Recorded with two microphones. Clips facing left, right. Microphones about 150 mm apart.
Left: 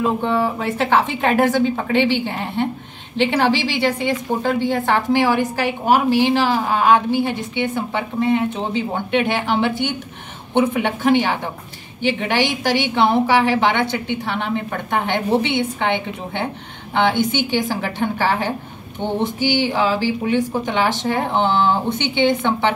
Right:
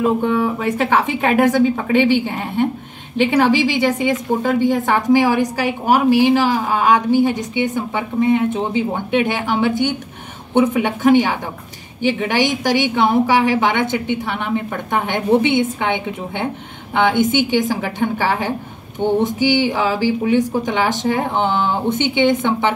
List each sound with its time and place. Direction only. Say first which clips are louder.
0.0 s a woman's voice: right 2 dB; 10° right (ahead or behind)